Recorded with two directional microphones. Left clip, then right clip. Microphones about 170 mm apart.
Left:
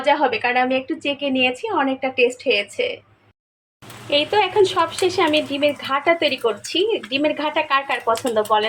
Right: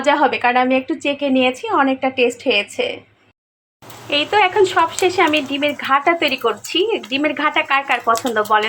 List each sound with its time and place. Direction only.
0.0 s a woman's voice: 15° right (ahead or behind)
4.1 s speech: centre (ahead or behind)